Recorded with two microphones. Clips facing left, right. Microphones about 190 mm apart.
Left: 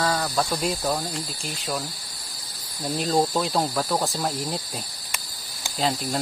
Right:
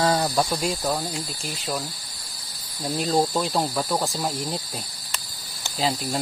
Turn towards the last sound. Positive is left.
turn(degrees=0)  # may be behind; listen again after turning